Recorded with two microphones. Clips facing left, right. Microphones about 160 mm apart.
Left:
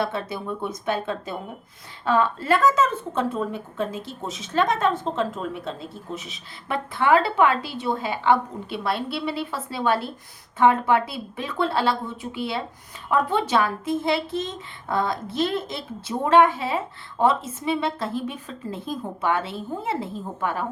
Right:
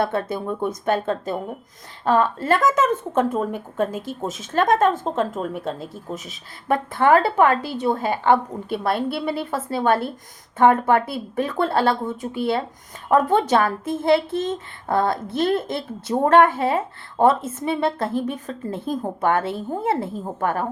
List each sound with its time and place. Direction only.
0.0 s speech: 55° right (ahead or behind)